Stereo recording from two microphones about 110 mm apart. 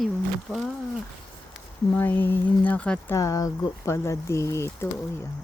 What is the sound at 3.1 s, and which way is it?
Speech, 30° left (ahead or behind).